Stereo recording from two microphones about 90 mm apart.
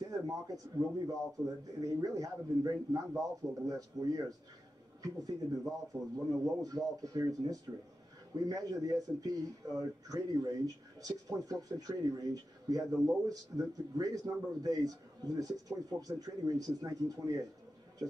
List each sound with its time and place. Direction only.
0.0 s a man's voice: 40° right (ahead or behind)